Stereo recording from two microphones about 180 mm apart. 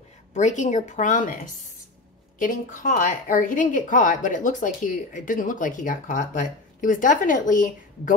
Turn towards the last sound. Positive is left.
turn(degrees=45)  # may be behind; listen again after turning